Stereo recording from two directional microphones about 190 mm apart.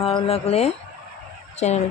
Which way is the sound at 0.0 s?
25° left (ahead or behind).